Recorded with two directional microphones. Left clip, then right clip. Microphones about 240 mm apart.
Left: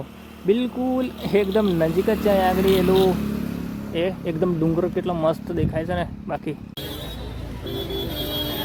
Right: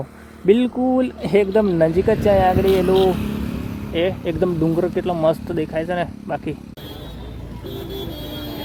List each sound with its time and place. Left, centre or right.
0.4 s speech: centre